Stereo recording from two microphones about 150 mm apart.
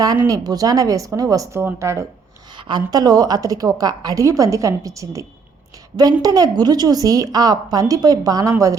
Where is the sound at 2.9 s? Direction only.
25° right (ahead or behind).